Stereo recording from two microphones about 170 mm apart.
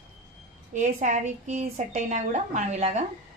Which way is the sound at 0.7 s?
50° right (ahead or behind).